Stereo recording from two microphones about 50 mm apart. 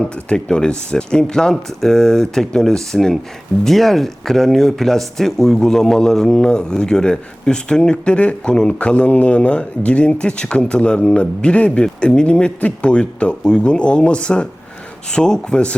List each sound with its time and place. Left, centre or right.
0.0 s speech: centre